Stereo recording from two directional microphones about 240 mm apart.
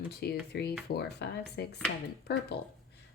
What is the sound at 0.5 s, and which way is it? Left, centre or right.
Speech, left.